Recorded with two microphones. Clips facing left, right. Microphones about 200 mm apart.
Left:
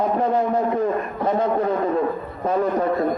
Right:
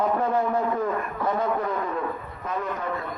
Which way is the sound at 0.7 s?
30° left (ahead or behind).